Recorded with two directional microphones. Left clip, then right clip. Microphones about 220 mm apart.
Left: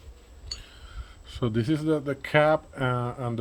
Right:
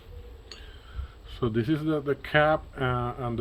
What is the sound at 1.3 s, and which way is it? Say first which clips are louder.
Speech: even; 35° left (ahead or behind).